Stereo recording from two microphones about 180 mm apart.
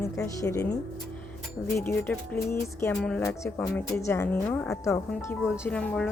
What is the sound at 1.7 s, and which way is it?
A woman's voice, 15° left (ahead or behind).